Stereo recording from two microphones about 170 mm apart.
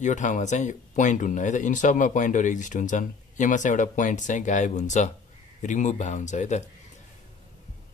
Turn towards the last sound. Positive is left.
turn(degrees=45)  # may be behind; listen again after turning